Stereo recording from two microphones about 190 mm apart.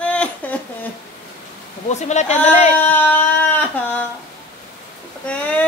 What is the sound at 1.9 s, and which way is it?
Speech, 35° left (ahead or behind).